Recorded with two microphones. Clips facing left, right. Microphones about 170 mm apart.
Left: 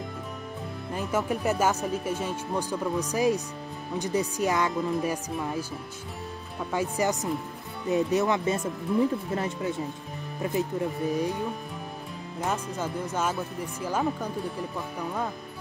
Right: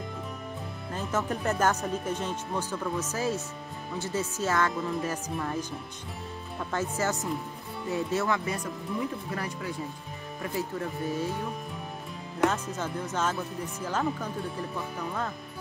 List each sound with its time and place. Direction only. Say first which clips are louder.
0.9 s speech: left 2 dB; 10° left (ahead or behind)
12.4 s speech: right 4 dB; 70° right (ahead or behind)
12.7 s speech: left 2 dB; 10° left (ahead or behind)